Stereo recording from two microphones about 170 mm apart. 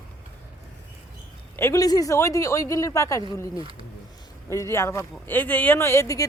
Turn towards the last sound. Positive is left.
turn(degrees=20)  # may be behind; listen again after turning